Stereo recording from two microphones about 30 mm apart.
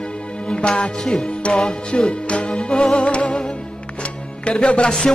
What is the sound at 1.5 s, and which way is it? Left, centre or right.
Music, left.